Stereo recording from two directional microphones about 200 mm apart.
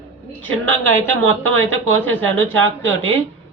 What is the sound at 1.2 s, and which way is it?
Speech, 70° right (ahead or behind).